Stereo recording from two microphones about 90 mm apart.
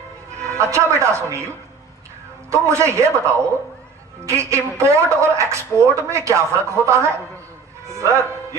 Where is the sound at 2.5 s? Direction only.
35° right (ahead or behind).